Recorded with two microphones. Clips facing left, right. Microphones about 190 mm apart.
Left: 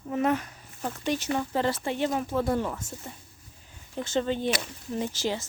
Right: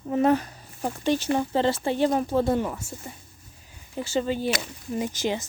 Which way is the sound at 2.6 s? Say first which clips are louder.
Right 2 dB; 10° right (ahead or behind).